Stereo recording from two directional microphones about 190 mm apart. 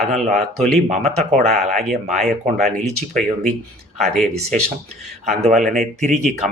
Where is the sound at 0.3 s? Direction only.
Centre (ahead or behind).